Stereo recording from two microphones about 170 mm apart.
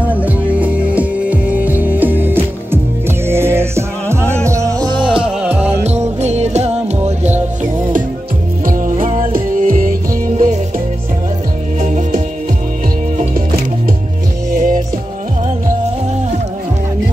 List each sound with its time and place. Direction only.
0.0 s music: 10° right (ahead or behind); by 5.2 s 30° right (ahead or behind)
5.5 s music: 40° right (ahead or behind)
8.9 s music: 35° right (ahead or behind)
9.2 s music: 55° right (ahead or behind)
11.8 s music: 45° right (ahead or behind)
14.5 s music: 50° right (ahead or behind)